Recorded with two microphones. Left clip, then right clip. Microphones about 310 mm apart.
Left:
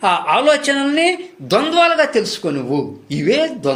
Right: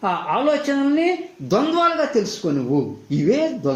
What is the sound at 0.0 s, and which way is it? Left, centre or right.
A man's voice, left.